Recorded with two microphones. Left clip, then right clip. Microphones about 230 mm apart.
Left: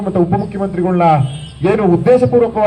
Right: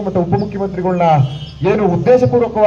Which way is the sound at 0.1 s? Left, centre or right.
Left.